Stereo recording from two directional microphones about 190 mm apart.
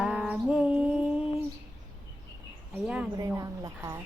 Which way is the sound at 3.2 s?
20° right (ahead or behind).